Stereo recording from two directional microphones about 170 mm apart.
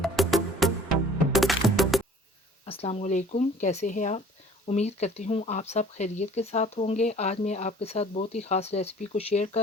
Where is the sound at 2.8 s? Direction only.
40° left (ahead or behind).